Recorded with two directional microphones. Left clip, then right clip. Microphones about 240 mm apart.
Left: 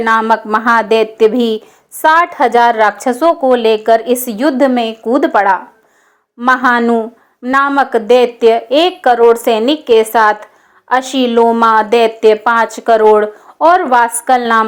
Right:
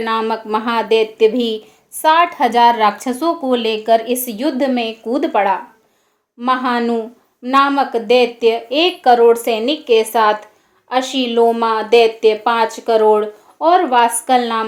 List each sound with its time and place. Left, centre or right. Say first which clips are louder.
0.0 s a woman's voice: left 7 dB; centre